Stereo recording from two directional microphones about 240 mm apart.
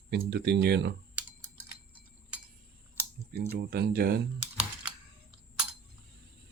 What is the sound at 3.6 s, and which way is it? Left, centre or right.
Speech, right.